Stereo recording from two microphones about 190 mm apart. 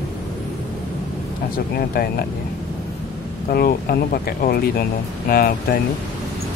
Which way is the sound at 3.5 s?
55° left (ahead or behind).